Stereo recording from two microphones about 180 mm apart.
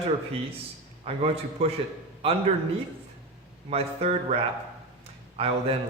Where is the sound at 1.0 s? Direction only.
35° right (ahead or behind).